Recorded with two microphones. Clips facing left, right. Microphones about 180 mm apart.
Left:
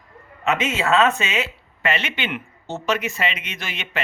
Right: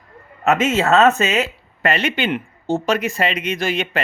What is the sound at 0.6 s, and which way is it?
Speech, 45° right (ahead or behind).